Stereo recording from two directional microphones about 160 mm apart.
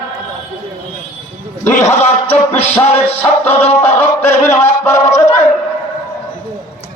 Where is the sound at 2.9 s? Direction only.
10° left (ahead or behind).